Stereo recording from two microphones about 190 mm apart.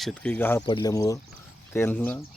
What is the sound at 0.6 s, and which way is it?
Speech, 25° left (ahead or behind).